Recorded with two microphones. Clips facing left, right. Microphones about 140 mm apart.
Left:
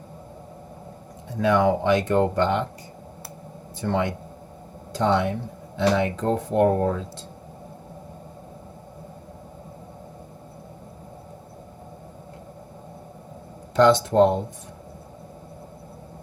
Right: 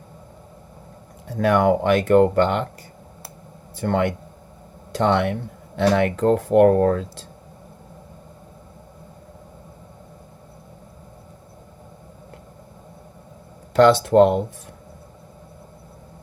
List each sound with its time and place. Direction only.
1.3 s speech: 60° right (ahead or behind)
3.8 s speech: 60° right (ahead or behind)
13.7 s speech: 65° right (ahead or behind)